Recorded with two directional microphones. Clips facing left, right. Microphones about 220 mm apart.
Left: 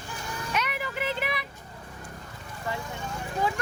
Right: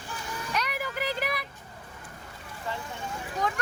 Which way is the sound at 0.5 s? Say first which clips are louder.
Left 1 dB; centre (ahead or behind).